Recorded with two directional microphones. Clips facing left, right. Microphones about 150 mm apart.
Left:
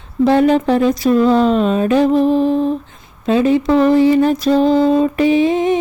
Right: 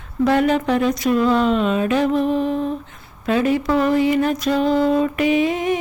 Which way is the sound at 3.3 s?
25° left (ahead or behind).